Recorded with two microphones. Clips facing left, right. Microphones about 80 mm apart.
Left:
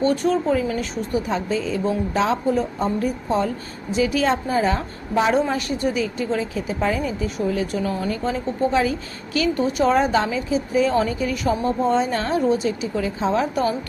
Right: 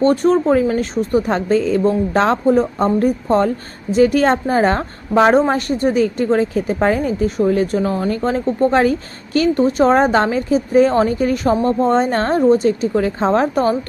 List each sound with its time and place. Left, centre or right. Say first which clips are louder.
0.0 s a woman's voice: right 6 dB; right